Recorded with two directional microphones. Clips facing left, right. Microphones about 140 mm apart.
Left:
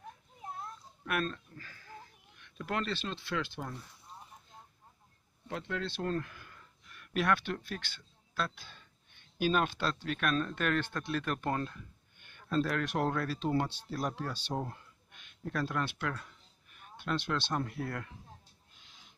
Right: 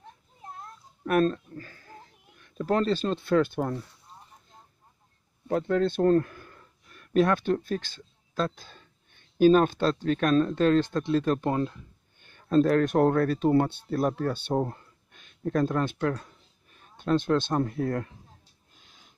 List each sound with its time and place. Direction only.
1.0 s speech: 40° right (ahead or behind)
5.5 s a sound: 40° right (ahead or behind)
7.3 s speech: 35° right (ahead or behind)
10.0 s speech: 35° right (ahead or behind)
12.2 s speech: 35° right (ahead or behind)
18.8 s music: 45° right (ahead or behind)